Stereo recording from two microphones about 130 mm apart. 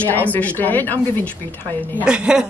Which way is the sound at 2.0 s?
5° right (ahead or behind).